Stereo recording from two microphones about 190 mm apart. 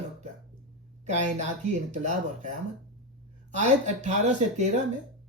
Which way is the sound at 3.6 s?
40° right (ahead or behind).